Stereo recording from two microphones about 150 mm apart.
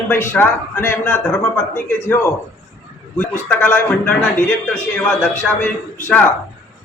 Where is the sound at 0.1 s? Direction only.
15° left (ahead or behind).